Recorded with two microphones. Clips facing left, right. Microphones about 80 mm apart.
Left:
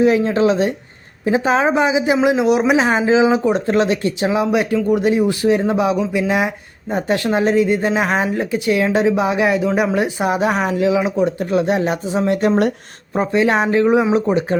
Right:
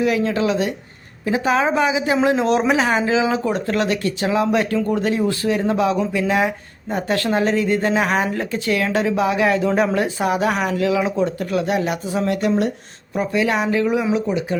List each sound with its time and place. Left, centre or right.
0.0 s speech: left
2.2 s speech: centre; by 14.6 s left